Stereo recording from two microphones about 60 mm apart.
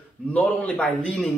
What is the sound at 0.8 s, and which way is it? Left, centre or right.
Speech, centre.